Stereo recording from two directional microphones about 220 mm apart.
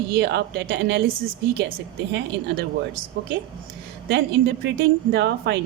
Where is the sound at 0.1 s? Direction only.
50° right (ahead or behind).